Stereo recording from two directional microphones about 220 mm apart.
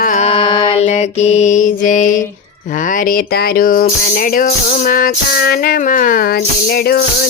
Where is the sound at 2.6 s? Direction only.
35° left (ahead or behind).